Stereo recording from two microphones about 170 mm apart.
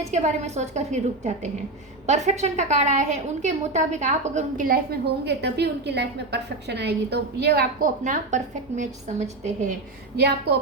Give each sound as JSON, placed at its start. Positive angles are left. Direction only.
{"t": 0.1, "sound": "a woman's voice", "side_deg": -40}
{"t": 10.2, "sound": "a woman's voice", "side_deg": -70}